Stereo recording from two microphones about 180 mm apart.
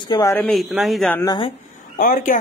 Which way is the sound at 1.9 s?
50° left (ahead or behind).